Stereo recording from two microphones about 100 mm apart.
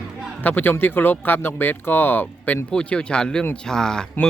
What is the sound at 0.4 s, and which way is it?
Speech, 20° left (ahead or behind).